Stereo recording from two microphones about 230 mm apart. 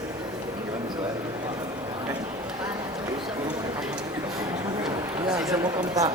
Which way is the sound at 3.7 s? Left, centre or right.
Centre.